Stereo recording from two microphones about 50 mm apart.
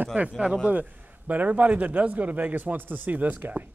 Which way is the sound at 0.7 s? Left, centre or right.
Right.